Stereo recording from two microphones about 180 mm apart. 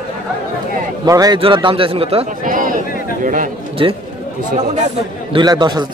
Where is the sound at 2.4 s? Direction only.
50° right (ahead or behind).